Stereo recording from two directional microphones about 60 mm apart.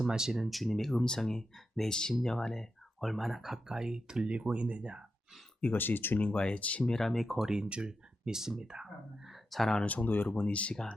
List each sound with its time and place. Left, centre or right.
0.0 s speech: centre
5.7 s speech: left
6.1 s speech: left
6.8 s speech: centre
9.8 s speech: left